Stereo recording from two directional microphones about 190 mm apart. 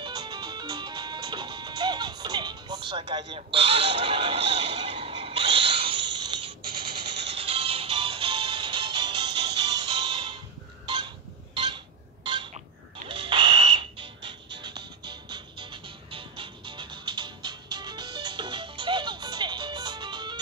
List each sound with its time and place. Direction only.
0.0 s music: 20° right (ahead or behind)
11.7 s a sound: 25° right (ahead or behind)
13.1 s music: 25° right (ahead or behind)